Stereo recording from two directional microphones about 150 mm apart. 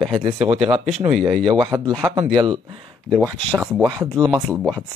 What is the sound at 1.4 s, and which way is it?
A man's voice, 30° right (ahead or behind).